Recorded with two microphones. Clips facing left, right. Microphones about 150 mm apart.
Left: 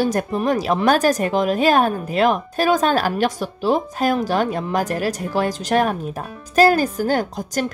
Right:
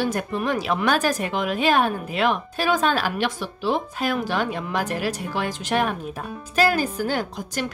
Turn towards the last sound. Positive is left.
turn(degrees=40)  # may be behind; listen again after turning